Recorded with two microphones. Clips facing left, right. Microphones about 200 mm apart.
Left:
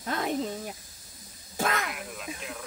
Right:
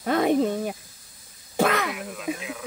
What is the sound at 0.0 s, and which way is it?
Speech, 70° right (ahead or behind).